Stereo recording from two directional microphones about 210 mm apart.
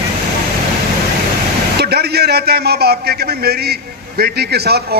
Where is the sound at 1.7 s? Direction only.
50° right (ahead or behind).